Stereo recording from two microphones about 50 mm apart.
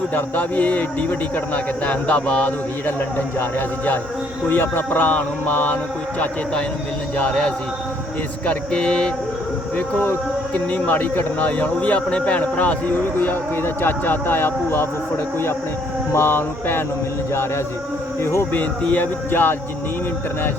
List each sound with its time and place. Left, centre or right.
0.1 s music: left
1.5 s speech: left
4.4 s music: left
6.1 s speech: left
10.5 s speech: left
13.1 s speech: left
16.1 s speech: left
18.2 s speech: left
18.5 s music: left